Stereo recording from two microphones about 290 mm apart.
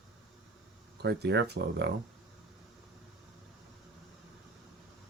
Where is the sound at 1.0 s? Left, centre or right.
Right.